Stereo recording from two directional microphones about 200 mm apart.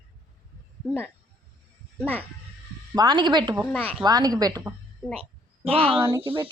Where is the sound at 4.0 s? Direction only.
20° right (ahead or behind).